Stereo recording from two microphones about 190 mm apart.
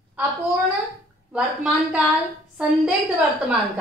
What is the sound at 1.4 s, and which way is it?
A woman's voice, 5° right (ahead or behind).